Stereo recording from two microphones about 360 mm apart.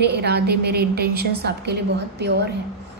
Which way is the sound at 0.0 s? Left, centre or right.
Right.